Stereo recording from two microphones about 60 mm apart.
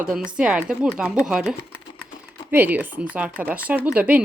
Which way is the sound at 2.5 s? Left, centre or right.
Right.